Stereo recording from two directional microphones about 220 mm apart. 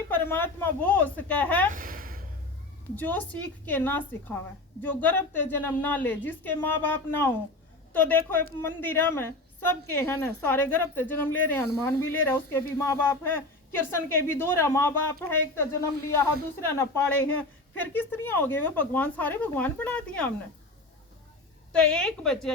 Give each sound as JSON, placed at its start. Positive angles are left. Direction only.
{"t": 0.3, "sound": "speech", "side_deg": 10}
{"t": 1.7, "sound": "a sound", "side_deg": -40}
{"t": 2.9, "sound": "speech", "side_deg": 5}
{"t": 21.7, "sound": "a woman's voice", "side_deg": 5}